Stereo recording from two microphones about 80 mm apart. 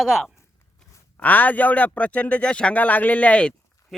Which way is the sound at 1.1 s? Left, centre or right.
Centre.